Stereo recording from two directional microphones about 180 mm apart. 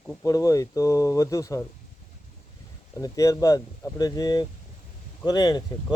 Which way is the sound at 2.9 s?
20° left (ahead or behind).